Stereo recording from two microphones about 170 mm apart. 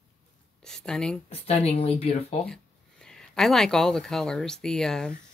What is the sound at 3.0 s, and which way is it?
Speech, 5° left (ahead or behind).